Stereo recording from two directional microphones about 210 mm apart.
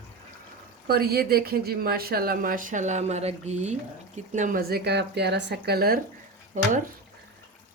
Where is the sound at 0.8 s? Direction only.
45° right (ahead or behind).